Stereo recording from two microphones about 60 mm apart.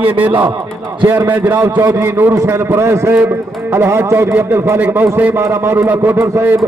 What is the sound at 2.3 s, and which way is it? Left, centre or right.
A man's voice, right.